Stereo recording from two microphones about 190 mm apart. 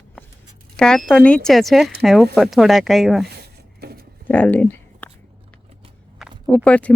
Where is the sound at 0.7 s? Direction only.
5° left (ahead or behind).